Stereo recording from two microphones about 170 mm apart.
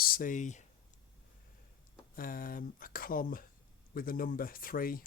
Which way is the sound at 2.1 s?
55° left (ahead or behind).